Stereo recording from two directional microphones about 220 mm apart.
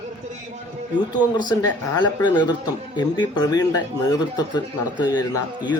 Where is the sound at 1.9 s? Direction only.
20° left (ahead or behind).